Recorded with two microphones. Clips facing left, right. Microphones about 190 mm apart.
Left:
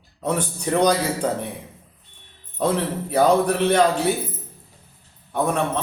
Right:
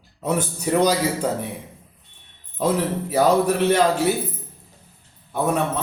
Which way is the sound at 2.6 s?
5° right (ahead or behind).